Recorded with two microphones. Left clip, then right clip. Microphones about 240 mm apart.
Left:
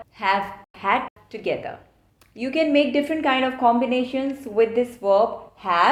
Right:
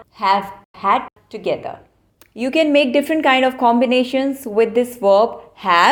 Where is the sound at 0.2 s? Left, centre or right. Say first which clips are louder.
Right 5 dB; centre.